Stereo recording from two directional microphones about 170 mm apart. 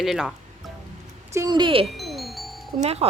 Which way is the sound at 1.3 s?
20° right (ahead or behind).